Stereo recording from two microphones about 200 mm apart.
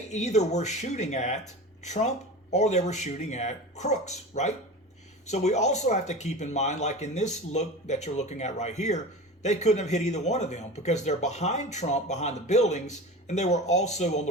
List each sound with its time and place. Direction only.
0.1 s speech: 35° left (ahead or behind)